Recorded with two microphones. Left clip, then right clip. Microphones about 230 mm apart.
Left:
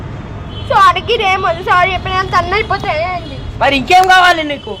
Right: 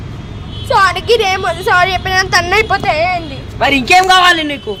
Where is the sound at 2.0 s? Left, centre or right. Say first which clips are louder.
Right 2 dB; right.